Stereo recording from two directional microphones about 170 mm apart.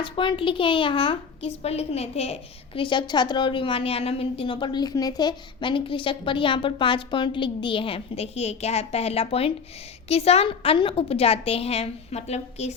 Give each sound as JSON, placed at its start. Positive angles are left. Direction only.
{"t": 0.0, "sound": "a child's voice", "side_deg": 30}